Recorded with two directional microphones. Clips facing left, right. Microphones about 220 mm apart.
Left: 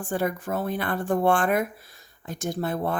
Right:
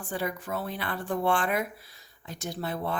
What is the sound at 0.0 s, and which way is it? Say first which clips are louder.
Speech: left 6 dB; 50° left (ahead or behind).